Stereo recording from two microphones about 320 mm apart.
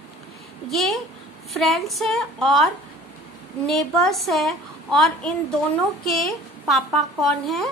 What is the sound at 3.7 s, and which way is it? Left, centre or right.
A woman's voice, centre.